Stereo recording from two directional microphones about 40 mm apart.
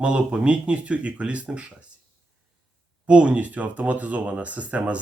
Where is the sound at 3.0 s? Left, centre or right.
Right.